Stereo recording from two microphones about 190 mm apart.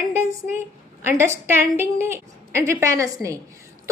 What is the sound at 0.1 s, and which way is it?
A woman's voice, 15° right (ahead or behind).